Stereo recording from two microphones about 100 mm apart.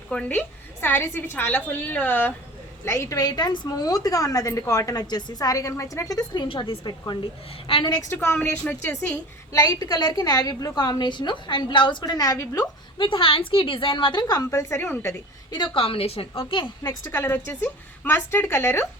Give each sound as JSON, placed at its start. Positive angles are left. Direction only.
{"t": 0.1, "sound": "a woman's voice", "side_deg": 15}
{"t": 8.1, "sound": "a woman's voice", "side_deg": 25}
{"t": 8.4, "sound": "a woman's voice", "side_deg": 10}
{"t": 9.5, "sound": "a woman's voice", "side_deg": 35}
{"t": 12.0, "sound": "a woman's voice", "side_deg": 40}
{"t": 13.0, "sound": "a woman's voice", "side_deg": 60}
{"t": 15.5, "sound": "a woman's voice", "side_deg": 55}
{"t": 17.0, "sound": "a woman's voice", "side_deg": 25}